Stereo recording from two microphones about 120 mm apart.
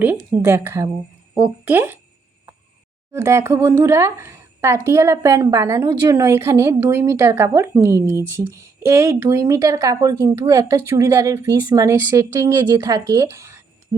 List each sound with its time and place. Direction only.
0.4 s speech: 20° right (ahead or behind)
3.1 s speech: 25° right (ahead or behind)